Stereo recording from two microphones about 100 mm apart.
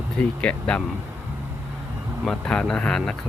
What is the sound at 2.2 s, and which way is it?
Speech, 10° left (ahead or behind).